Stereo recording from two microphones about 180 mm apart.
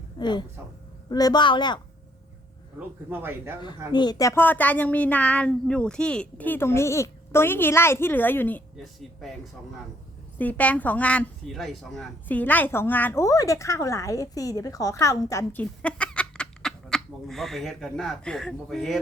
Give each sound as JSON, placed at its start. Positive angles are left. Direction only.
{"t": 0.2, "sound": "a woman's voice", "side_deg": 25}
{"t": 2.7, "sound": "speech", "side_deg": -10}
{"t": 3.9, "sound": "speech", "side_deg": 20}
{"t": 8.8, "sound": "speech", "side_deg": 0}
{"t": 10.3, "sound": "speech", "side_deg": 10}